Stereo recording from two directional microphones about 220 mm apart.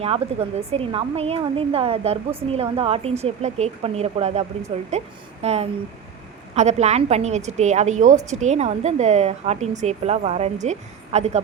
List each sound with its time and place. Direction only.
0.0 s a woman's voice: 25° right (ahead or behind)